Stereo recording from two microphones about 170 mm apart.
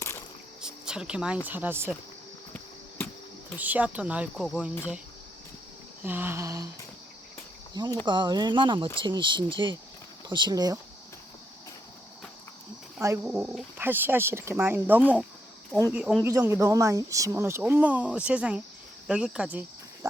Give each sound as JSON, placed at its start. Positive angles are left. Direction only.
{"t": 0.6, "sound": "a sound", "side_deg": -5}
{"t": 1.5, "sound": "speech", "side_deg": -10}
{"t": 3.6, "sound": "speech", "side_deg": -10}
{"t": 6.0, "sound": "speech", "side_deg": -10}
{"t": 7.7, "sound": "speech", "side_deg": -25}
{"t": 13.0, "sound": "speech", "side_deg": -10}
{"t": 15.0, "sound": "speech", "side_deg": 5}
{"t": 15.9, "sound": "speech", "side_deg": -5}
{"t": 16.2, "sound": "speech", "side_deg": -15}